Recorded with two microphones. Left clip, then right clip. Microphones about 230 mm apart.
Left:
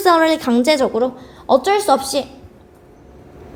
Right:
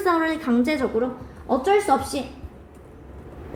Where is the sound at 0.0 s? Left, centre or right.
Left.